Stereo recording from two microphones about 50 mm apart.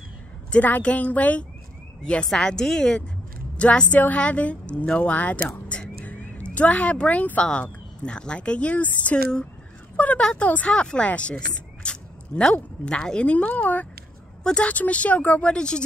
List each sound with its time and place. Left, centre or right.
0.5 s a woman's voice: left
2.2 s a woman's voice: centre; by 5.4 s left
5.7 s a sound: left
6.4 s a woman's voice: left
14.4 s speech: centre
14.7 s a woman's voice: left
15.5 s speech: centre